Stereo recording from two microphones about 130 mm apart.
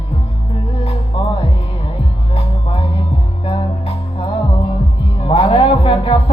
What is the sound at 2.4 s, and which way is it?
Music, 45° left (ahead or behind).